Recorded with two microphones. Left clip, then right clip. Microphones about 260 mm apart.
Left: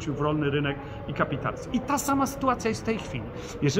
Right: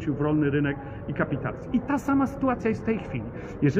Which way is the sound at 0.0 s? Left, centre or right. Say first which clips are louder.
Right 2 dB; centre.